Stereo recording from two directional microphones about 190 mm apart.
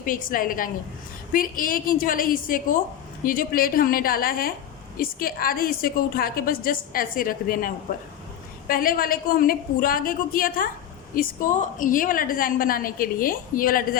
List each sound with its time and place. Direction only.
0.0 s a woman's voice: 45° left (ahead or behind)